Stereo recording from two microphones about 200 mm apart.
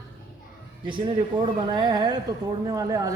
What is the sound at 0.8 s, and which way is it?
A man's voice, 25° right (ahead or behind).